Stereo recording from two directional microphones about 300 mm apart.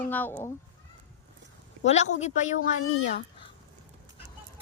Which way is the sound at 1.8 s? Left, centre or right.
Left.